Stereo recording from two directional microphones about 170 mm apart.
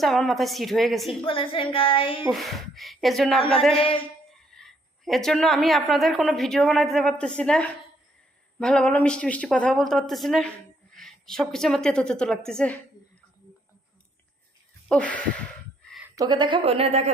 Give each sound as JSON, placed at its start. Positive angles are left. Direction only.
{"t": 0.0, "sound": "speech", "side_deg": 0}
{"t": 1.2, "sound": "a woman's voice", "side_deg": 30}
{"t": 2.3, "sound": "a woman's voice", "side_deg": 0}
{"t": 14.8, "sound": "speech", "side_deg": 5}
{"t": 16.1, "sound": "a woman's voice", "side_deg": -25}